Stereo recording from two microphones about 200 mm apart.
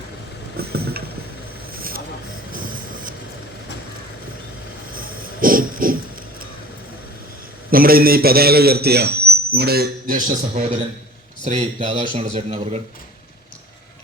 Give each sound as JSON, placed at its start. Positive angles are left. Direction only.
{"t": 0.5, "sound": "vehicle", "side_deg": -50}
{"t": 2.5, "sound": "printer", "side_deg": -45}
{"t": 4.9, "sound": "a sound", "side_deg": -45}
{"t": 7.7, "sound": "a man's voice", "side_deg": -45}
{"t": 11.4, "sound": "speech", "side_deg": -25}